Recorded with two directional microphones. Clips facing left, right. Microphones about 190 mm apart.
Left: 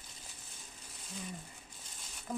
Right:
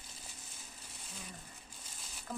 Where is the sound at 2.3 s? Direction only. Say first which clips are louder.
Left 4 dB; 10° left (ahead or behind).